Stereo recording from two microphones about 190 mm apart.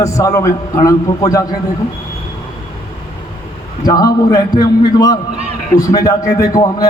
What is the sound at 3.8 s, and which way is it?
A man's voice, 20° left (ahead or behind).